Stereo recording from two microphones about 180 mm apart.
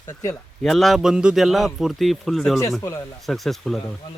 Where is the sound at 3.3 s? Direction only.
Centre (ahead or behind).